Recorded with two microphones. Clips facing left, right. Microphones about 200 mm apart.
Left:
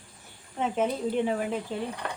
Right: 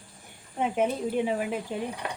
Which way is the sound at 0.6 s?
10° right (ahead or behind).